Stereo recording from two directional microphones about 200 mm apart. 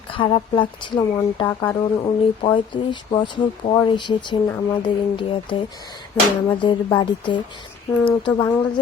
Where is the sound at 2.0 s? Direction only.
25° left (ahead or behind).